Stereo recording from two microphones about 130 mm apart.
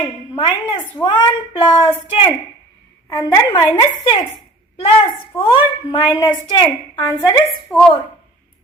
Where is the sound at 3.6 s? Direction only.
30° left (ahead or behind).